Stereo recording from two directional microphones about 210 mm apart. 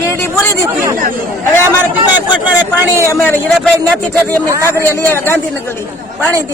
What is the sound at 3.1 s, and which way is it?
Speech, 10° left (ahead or behind).